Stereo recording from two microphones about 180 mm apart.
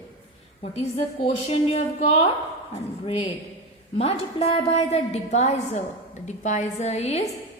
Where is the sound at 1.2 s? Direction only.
35° left (ahead or behind).